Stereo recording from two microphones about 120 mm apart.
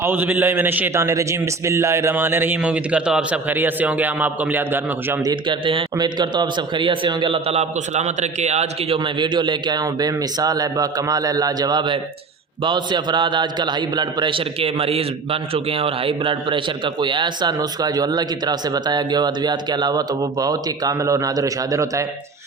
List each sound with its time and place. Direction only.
0.0 s a man's voice: 15° right (ahead or behind)
5.2 s a man's voice: 40° right (ahead or behind)